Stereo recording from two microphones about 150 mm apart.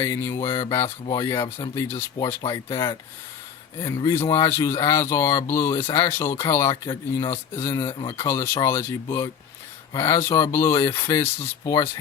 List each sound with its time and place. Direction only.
0.0 s speech: 20° left (ahead or behind)
1.4 s speech: 35° left (ahead or behind)
1.7 s speech: 15° left (ahead or behind)